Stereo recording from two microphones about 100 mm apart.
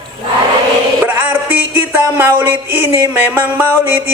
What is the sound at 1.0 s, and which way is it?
Music, 20° right (ahead or behind).